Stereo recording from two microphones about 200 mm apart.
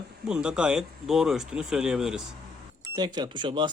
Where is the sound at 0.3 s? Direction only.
5° right (ahead or behind).